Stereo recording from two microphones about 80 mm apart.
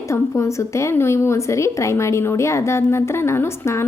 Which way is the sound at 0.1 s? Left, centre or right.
Left.